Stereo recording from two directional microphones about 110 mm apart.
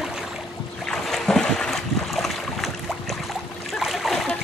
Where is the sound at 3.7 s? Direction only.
Centre (ahead or behind).